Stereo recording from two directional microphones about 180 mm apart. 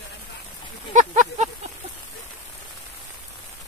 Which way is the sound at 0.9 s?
45° right (ahead or behind).